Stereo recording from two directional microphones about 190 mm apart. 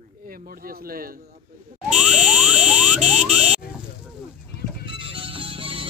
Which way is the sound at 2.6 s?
40° right (ahead or behind).